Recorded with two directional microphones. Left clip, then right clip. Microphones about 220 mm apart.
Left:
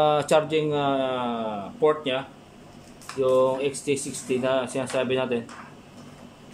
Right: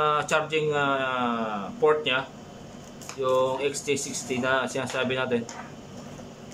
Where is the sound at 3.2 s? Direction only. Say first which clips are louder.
Left 3 dB; 15° left (ahead or behind).